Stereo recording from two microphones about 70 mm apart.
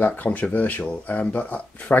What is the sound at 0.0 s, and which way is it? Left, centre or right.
Speech, left.